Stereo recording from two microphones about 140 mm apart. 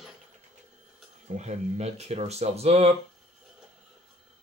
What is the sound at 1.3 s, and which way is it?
Speech, 55° right (ahead or behind).